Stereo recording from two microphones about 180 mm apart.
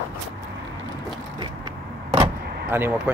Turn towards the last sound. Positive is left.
turn(degrees=-10)  # may be behind; listen again after turning